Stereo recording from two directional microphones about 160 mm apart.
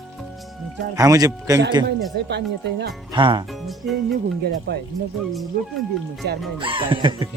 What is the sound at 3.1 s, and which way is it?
Speech, 30° right (ahead or behind).